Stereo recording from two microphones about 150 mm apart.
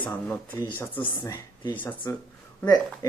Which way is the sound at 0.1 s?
20° left (ahead or behind).